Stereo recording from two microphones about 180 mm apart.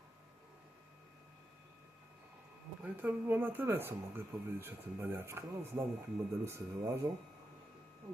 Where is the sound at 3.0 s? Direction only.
10° right (ahead or behind).